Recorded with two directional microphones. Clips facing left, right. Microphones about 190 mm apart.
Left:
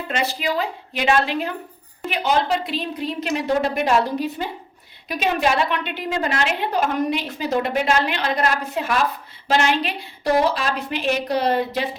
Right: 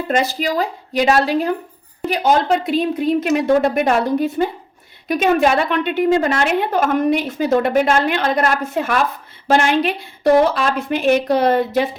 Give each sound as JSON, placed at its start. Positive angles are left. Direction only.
{"t": 0.1, "sound": "a woman's voice", "side_deg": -40}